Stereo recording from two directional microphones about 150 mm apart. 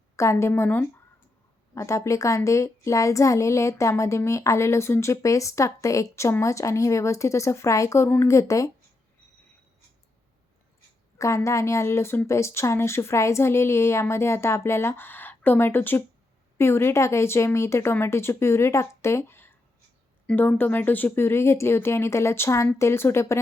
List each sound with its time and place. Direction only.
0.2 s a woman's voice: 20° left (ahead or behind)
11.2 s a woman's voice: 20° left (ahead or behind)